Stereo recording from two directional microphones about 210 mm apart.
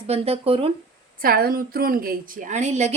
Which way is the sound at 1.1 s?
45° right (ahead or behind).